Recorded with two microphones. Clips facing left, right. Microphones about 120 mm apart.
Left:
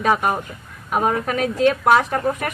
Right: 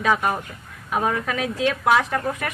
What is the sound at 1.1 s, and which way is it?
Speech, 50° left (ahead or behind).